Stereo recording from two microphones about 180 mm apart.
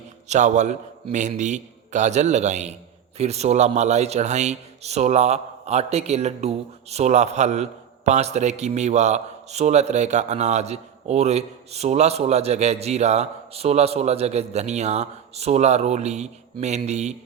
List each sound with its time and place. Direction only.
0.3 s a man's voice: 40° right (ahead or behind)